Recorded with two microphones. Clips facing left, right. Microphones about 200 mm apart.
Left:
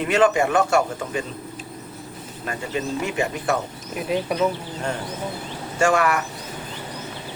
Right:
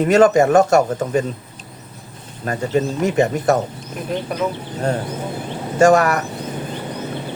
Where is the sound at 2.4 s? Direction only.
40° right (ahead or behind).